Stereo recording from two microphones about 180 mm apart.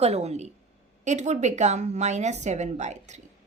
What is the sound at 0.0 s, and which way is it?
A woman's voice, 35° right (ahead or behind).